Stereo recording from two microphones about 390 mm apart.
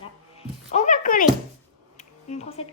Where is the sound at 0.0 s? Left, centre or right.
Centre.